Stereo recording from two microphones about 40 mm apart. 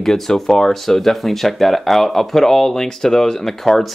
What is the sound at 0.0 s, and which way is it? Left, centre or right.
Speech, centre.